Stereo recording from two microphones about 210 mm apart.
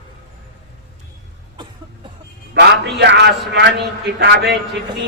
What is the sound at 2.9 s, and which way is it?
A man's voice, 55° right (ahead or behind).